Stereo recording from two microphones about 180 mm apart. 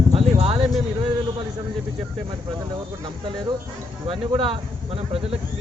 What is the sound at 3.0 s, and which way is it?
Speech, 25° right (ahead or behind).